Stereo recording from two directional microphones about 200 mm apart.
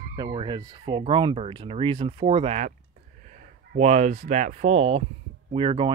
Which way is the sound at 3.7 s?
35° right (ahead or behind).